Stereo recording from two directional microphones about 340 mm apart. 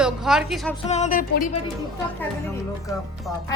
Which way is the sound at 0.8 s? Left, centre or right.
Centre.